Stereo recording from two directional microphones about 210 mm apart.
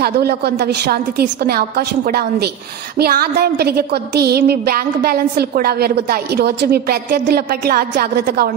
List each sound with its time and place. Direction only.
0.0 s a woman's voice: 50° right (ahead or behind)